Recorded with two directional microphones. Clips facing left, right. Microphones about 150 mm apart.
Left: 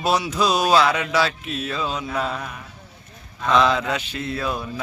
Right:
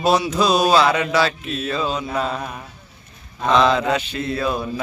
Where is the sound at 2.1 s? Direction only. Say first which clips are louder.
Right 2 dB; 25° right (ahead or behind).